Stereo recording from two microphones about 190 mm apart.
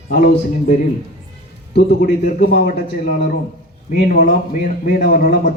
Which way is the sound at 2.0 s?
40° left (ahead or behind).